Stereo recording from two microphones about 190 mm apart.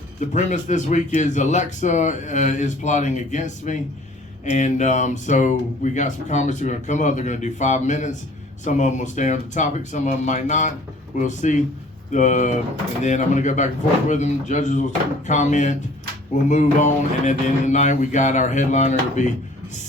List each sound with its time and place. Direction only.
0.2 s speech: 40° left (ahead or behind)